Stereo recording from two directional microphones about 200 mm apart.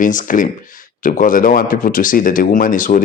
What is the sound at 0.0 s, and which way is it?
Speech, 40° left (ahead or behind).